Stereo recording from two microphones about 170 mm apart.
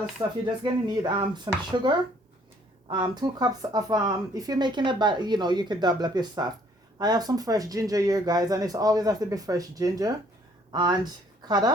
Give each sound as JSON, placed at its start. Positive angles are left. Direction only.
{"t": 0.2, "sound": "speech", "side_deg": -25}